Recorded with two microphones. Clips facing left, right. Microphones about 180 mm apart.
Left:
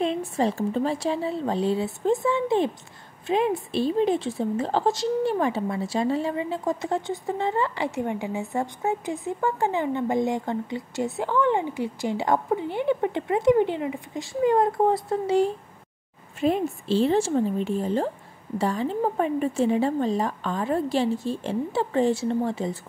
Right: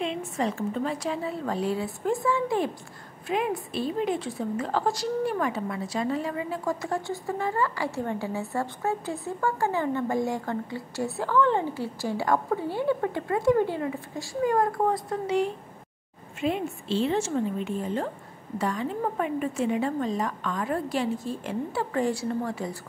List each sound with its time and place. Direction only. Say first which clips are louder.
0.0 s a woman's voice: left 4 dB; 35° left (ahead or behind)